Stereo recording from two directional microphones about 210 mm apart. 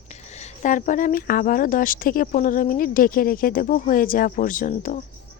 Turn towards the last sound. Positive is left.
turn(degrees=40)  # may be behind; listen again after turning